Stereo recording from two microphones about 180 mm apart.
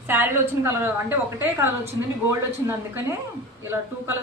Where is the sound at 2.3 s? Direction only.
15° right (ahead or behind).